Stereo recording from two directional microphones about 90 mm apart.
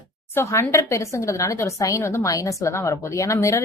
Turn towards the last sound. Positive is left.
turn(degrees=35)  # may be behind; listen again after turning